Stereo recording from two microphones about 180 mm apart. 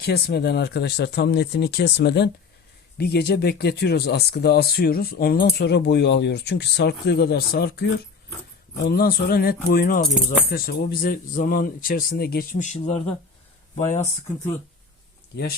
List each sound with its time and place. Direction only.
0.0 s speech: 60° left (ahead or behind)
8.9 s speech: 60° left (ahead or behind)
12.5 s speech: 40° left (ahead or behind)